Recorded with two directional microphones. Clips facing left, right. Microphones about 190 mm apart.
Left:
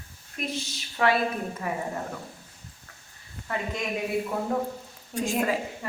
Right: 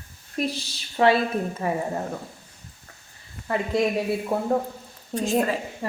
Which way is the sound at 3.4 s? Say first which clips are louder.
Right 8 dB; 35° right (ahead or behind).